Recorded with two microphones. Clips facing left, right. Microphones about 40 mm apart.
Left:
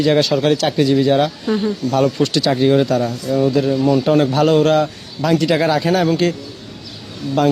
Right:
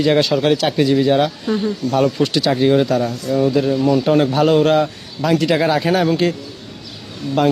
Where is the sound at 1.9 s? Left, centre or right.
Centre.